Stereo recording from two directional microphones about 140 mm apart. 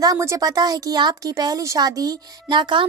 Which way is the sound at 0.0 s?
25° right (ahead or behind).